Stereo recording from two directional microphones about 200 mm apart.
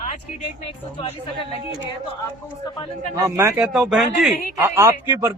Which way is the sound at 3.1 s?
15° right (ahead or behind).